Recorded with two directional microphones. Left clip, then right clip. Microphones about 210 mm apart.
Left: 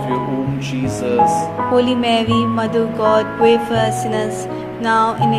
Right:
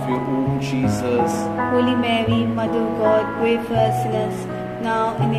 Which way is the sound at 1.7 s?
40° left (ahead or behind).